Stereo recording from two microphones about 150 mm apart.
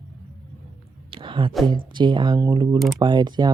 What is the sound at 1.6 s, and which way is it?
Speech, 30° right (ahead or behind).